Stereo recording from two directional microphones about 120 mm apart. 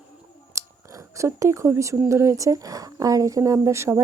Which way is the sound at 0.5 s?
25° right (ahead or behind).